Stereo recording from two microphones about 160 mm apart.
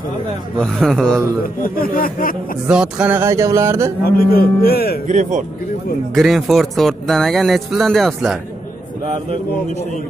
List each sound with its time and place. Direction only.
0.6 s speech: centre (ahead or behind)
1.4 s speech: 65° left (ahead or behind)
2.7 s a sound: 5° right (ahead or behind)
4.0 s speech: 70° left (ahead or behind)
5.0 s speech: 45° right (ahead or behind)
6.1 s speech: centre (ahead or behind)